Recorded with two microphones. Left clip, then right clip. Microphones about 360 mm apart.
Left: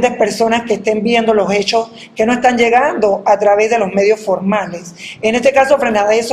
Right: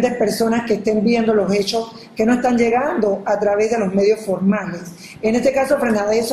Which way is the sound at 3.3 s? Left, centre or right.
Left.